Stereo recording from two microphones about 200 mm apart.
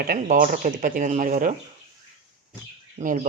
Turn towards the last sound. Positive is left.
turn(degrees=-40)  # may be behind; listen again after turning